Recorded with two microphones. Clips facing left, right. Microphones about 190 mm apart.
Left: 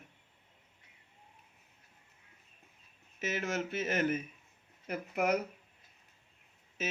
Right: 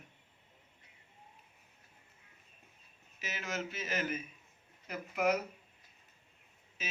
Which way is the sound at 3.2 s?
55° left (ahead or behind).